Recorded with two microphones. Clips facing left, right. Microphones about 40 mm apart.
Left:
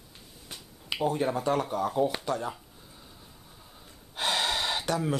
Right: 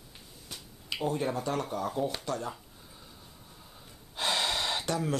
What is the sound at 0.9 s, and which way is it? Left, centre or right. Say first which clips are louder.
Speech: left 3 dB; centre.